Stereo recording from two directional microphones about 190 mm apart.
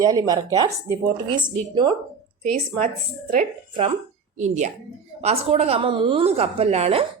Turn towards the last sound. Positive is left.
turn(degrees=-35)  # may be behind; listen again after turning